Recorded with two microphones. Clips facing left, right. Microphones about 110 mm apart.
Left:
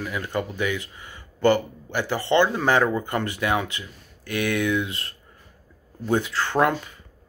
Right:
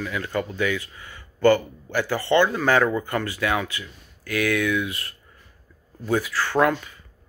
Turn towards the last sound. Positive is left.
turn(degrees=25)  # may be behind; listen again after turning